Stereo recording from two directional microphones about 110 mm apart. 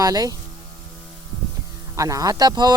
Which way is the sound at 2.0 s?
30° right (ahead or behind).